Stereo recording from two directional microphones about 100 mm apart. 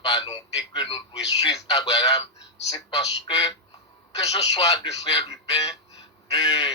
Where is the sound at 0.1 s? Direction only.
50° left (ahead or behind).